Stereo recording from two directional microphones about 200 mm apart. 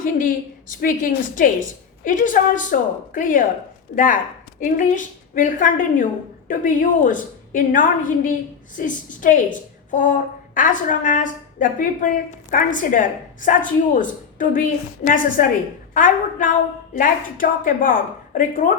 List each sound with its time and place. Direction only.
0.0 s a woman's voice: 40° left (ahead or behind)